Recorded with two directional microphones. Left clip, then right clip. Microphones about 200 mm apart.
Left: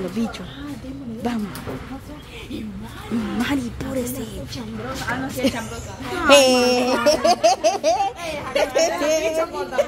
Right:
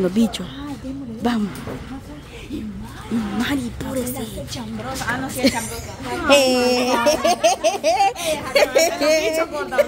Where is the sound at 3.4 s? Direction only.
5° right (ahead or behind).